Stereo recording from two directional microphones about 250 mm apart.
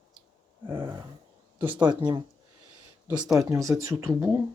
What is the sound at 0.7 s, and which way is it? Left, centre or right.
Speech, centre.